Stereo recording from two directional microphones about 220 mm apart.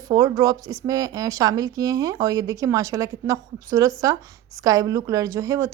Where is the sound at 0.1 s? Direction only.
15° right (ahead or behind).